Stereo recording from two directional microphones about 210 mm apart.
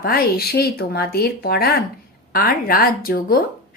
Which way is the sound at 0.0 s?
45° left (ahead or behind).